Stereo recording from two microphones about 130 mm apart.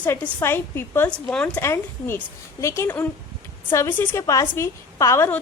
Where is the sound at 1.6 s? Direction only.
20° left (ahead or behind).